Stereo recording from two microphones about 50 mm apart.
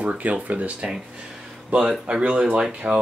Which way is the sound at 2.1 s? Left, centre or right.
Centre.